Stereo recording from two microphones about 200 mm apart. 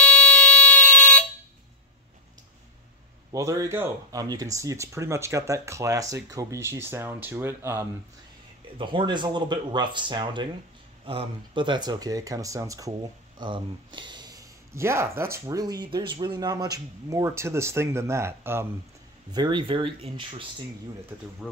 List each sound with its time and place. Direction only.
0.0 s fire alarm: 5° left (ahead or behind)
3.3 s speech: 15° right (ahead or behind)
8.7 s speech: 25° right (ahead or behind)